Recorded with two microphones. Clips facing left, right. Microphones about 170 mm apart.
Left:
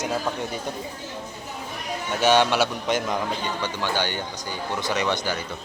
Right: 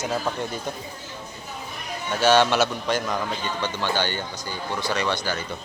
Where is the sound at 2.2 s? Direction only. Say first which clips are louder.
Right 1 dB; 15° left (ahead or behind).